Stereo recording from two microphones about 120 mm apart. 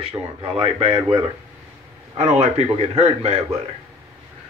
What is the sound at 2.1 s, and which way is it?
A man's voice, 65° right (ahead or behind).